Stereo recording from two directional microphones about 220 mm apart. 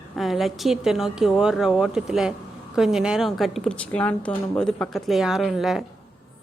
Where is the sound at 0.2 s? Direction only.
Centre (ahead or behind).